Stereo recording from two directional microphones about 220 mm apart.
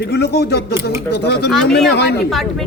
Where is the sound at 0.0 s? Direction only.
50° left (ahead or behind).